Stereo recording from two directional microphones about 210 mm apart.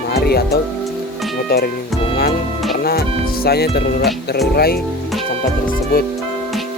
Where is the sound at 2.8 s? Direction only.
45° left (ahead or behind).